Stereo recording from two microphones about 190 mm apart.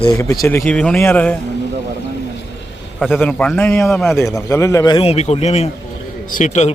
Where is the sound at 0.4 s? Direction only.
10° left (ahead or behind).